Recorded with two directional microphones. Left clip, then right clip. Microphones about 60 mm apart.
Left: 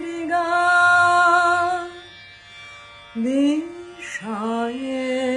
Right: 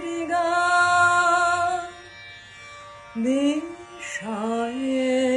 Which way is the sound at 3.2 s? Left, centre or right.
Left.